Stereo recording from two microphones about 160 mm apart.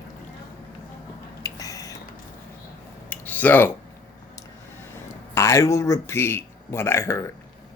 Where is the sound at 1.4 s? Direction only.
20° left (ahead or behind).